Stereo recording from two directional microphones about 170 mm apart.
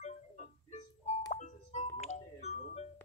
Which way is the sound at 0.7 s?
40° left (ahead or behind).